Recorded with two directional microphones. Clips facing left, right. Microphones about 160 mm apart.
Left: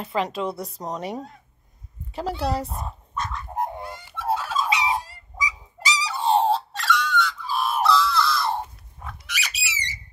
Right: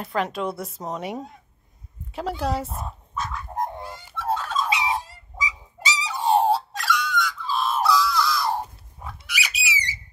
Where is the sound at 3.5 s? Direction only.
10° left (ahead or behind).